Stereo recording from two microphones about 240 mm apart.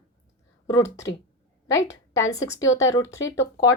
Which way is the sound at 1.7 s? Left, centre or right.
Centre.